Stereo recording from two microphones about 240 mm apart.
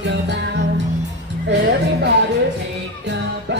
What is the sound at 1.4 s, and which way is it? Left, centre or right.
Music, right.